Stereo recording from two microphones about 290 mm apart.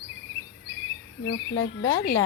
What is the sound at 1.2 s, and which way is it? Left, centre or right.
Speech, left.